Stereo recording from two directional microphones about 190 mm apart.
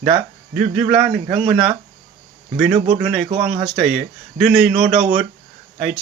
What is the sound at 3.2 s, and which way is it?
Speech, 35° right (ahead or behind).